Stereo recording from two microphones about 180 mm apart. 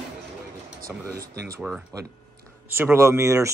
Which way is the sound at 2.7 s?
10° right (ahead or behind).